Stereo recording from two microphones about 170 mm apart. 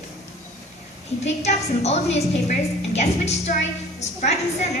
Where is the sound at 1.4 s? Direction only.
40° left (ahead or behind).